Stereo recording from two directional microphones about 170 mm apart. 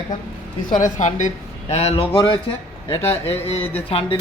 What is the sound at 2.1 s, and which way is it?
Speech, 25° left (ahead or behind).